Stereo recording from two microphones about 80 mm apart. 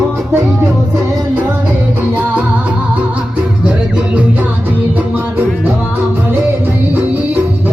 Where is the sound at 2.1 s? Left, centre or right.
Right.